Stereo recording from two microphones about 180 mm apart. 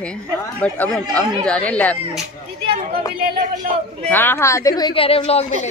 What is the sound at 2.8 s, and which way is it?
A man's voice, 55° right (ahead or behind).